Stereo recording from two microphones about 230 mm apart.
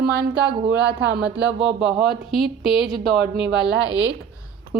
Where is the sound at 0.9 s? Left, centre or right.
Right.